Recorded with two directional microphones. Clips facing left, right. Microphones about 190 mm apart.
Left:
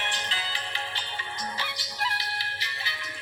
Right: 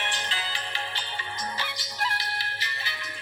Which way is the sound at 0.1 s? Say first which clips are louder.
Right 1 dB; 50° right (ahead or behind).